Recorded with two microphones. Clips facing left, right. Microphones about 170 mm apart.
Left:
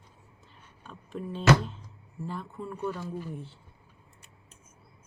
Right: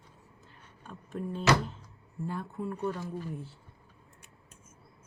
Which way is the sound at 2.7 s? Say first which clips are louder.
Left 1 dB; 5° left (ahead or behind).